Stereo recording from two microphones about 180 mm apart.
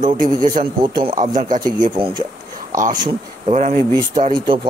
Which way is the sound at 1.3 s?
50° right (ahead or behind).